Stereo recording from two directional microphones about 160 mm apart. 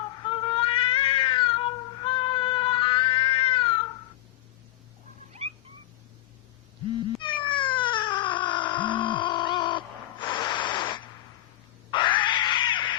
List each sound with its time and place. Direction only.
0.3 s cat: 35° left (ahead or behind)
7.4 s cat: 30° left (ahead or behind)